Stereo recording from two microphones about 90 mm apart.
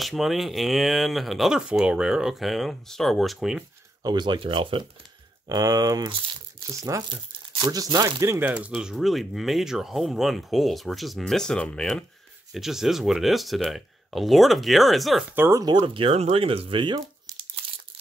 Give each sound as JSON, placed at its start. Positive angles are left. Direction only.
{"t": 0.0, "sound": "speech", "side_deg": 0}
{"t": 4.0, "sound": "speech", "side_deg": -50}
{"t": 5.5, "sound": "speech", "side_deg": -45}
{"t": 7.1, "sound": "crumpling", "side_deg": -65}
{"t": 7.7, "sound": "speech", "side_deg": -40}
{"t": 8.4, "sound": "speech", "side_deg": -15}
{"t": 12.5, "sound": "speech", "side_deg": -5}
{"t": 15.3, "sound": "speech", "side_deg": -25}
{"t": 15.6, "sound": "speech", "side_deg": -40}
{"t": 15.9, "sound": "speech", "side_deg": -80}